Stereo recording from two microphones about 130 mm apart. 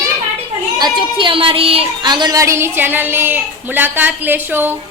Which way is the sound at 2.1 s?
35° right (ahead or behind).